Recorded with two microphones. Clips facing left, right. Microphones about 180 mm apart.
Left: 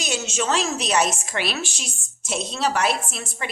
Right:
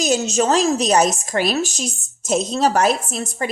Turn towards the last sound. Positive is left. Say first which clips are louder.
# right 7 dB
turn(degrees=-40)  # may be behind; listen again after turning